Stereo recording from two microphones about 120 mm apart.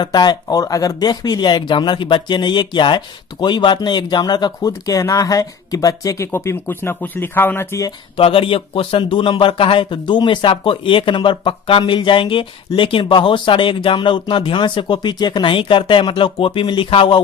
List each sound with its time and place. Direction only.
0.0 s speech: 35° left (ahead or behind); by 7.9 s 20° left (ahead or behind)
8.1 s speech: 50° left (ahead or behind)